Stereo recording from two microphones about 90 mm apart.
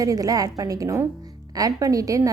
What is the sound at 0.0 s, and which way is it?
A woman's voice, 40° right (ahead or behind).